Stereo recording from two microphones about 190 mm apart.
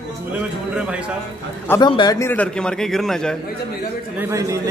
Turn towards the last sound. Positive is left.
turn(degrees=-15)  # may be behind; listen again after turning